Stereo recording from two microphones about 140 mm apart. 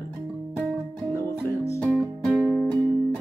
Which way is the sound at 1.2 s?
20° left (ahead or behind).